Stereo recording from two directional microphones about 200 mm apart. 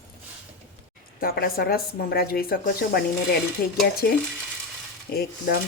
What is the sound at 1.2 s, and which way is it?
Speech, 50° left (ahead or behind).